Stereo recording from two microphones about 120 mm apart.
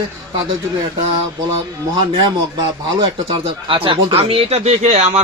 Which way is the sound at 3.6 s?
45° right (ahead or behind).